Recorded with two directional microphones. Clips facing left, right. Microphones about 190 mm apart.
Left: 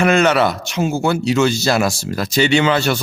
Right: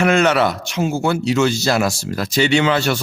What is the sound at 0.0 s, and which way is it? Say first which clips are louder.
Speech: left 1 dB; 25° left (ahead or behind).